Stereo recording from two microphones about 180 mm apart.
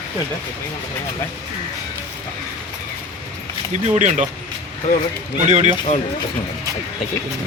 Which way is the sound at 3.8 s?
40° right (ahead or behind).